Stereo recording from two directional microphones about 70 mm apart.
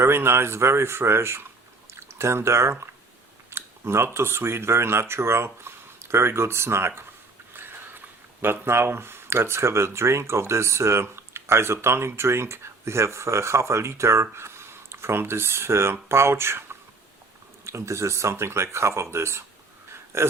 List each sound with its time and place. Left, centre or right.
0.0 s speech: right